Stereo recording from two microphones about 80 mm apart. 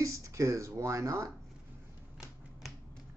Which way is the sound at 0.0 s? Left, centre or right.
Right.